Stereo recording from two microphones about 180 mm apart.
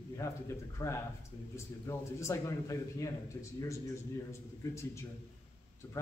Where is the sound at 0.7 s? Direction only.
15° left (ahead or behind).